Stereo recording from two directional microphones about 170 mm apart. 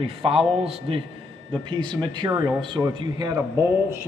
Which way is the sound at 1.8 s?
25° right (ahead or behind).